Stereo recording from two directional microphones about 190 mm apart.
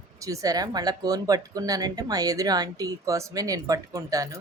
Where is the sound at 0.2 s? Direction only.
15° right (ahead or behind).